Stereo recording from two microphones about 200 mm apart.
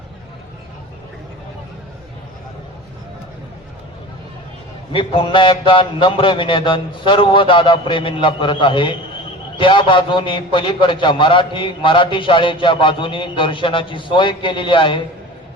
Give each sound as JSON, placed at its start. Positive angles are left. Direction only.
{"t": 4.9, "sound": "a man's voice", "side_deg": 25}